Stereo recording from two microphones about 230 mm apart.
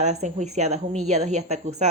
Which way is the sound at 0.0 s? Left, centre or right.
Right.